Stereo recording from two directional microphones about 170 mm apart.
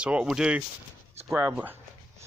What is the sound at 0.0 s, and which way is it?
Speech, 5° right (ahead or behind).